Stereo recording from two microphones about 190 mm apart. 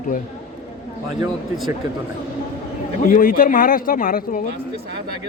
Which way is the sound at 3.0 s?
45° left (ahead or behind).